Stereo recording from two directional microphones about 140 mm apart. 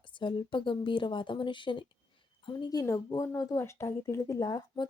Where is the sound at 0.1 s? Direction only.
35° left (ahead or behind).